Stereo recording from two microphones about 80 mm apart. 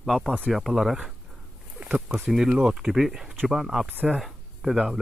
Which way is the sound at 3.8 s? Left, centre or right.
Right.